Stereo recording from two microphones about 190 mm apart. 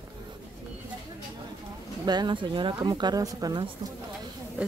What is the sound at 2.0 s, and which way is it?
Speech, 20° right (ahead or behind).